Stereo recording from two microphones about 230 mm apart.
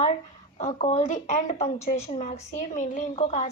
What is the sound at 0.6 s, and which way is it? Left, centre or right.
A woman's voice, left.